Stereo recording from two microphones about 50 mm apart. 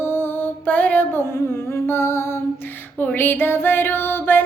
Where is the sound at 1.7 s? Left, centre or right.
Left.